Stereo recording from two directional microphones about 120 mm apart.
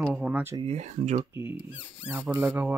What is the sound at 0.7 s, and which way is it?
Speech, 80° right.